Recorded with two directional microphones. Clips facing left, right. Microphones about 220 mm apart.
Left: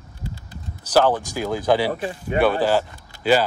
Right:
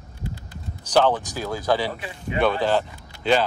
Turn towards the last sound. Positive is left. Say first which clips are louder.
# left 2 dB
turn(degrees=5)  # may be behind; listen again after turning